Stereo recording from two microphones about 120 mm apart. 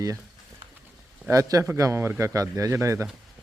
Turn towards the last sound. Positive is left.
turn(degrees=-25)  # may be behind; listen again after turning